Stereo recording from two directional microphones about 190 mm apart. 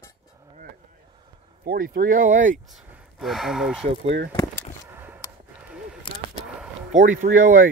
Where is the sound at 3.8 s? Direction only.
35° right (ahead or behind).